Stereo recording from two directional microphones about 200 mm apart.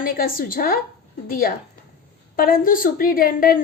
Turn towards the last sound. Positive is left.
turn(degrees=45)  # may be behind; listen again after turning